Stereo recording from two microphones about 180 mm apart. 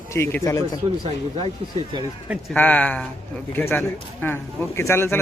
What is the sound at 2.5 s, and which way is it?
Speech, 10° left (ahead or behind).